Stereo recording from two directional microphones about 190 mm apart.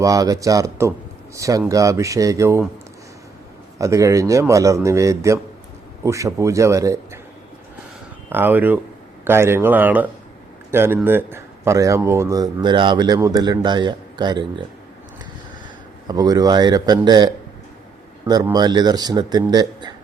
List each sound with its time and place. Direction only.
0.0 s speech: 20° right (ahead or behind)
3.8 s speech: 15° right (ahead or behind)
8.3 s speech: 10° right (ahead or behind)
16.0 s speech: 20° right (ahead or behind)
18.5 s speech: 20° right (ahead or behind)